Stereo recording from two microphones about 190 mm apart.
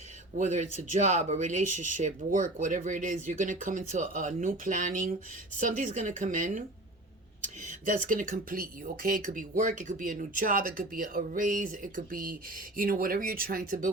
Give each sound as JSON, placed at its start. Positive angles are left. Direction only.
{"t": 0.3, "sound": "speech", "side_deg": -40}